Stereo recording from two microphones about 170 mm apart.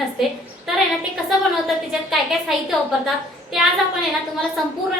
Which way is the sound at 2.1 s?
Centre (ahead or behind).